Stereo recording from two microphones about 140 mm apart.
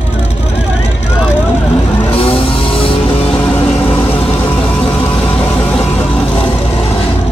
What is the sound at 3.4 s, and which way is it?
Vehicle, 10° left (ahead or behind).